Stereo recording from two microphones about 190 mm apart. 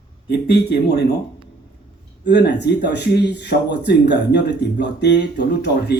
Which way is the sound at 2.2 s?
65° left (ahead or behind).